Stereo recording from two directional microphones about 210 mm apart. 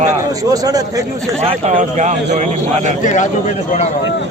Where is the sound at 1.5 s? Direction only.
35° right (ahead or behind).